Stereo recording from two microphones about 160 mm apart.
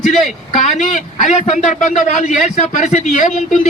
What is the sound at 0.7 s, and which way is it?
A man's voice, 55° left (ahead or behind).